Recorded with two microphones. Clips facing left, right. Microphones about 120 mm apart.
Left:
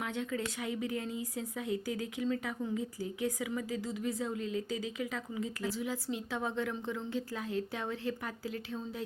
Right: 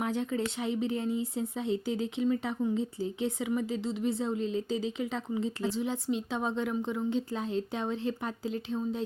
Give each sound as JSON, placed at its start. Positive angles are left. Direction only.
{"t": 0.0, "sound": "speech", "side_deg": -30}